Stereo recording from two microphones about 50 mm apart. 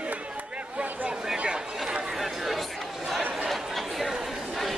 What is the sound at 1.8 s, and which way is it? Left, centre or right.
Chatter, centre.